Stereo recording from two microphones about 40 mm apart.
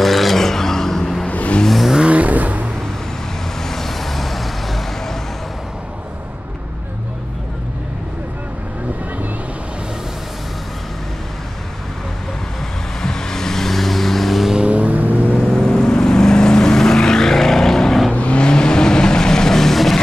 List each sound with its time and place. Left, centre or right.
0.0 s a sound: centre
1.3 s vehicle: left
2.0 s vehicle: right
3.6 s vehicle: centre
13.0 s vehicle: centre
14.5 s vehicle: right
15.3 s vehicle: centre
18.1 s vehicle: left; by 20.0 s centre